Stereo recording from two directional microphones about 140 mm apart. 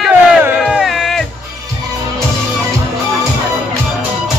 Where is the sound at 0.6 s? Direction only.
Centre (ahead or behind).